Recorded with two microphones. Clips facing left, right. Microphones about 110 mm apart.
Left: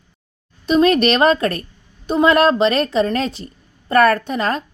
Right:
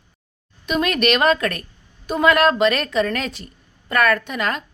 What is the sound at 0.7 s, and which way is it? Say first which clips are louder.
A woman's voice: left 6 dB; 30° left (ahead or behind).